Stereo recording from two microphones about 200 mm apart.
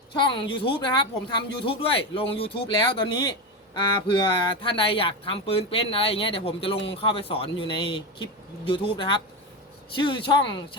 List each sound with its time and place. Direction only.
0.1 s speech: 25° left (ahead or behind)